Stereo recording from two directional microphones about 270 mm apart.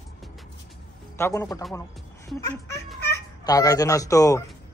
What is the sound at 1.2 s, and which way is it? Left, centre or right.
Speech, centre.